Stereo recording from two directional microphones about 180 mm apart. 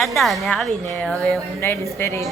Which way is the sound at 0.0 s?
Centre (ahead or behind).